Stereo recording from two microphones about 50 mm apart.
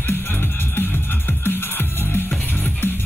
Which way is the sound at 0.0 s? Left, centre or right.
Left.